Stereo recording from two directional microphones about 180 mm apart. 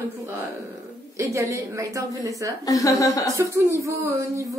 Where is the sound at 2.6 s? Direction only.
20° left (ahead or behind).